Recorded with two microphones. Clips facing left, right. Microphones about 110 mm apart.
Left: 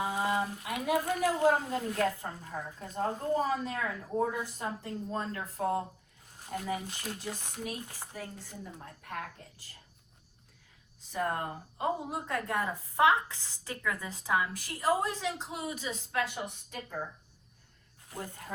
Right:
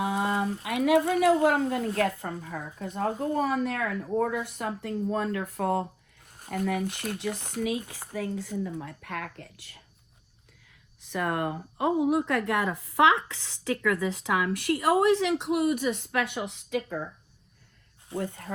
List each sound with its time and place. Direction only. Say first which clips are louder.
0.0 s frying: right 4 dB; 70° right (ahead or behind)
0.6 s a woman's voice: right 8 dB; 80° right
3.3 s a woman's voice: right 4 dB; 85° right; by 5.8 s 65° right (ahead or behind)
6.7 s speech: right 7 dB; 85° right
11.0 s speech: right 4 dB; 85° right
18.2 s a woman's voice: right 8 dB; 70° right (ahead or behind)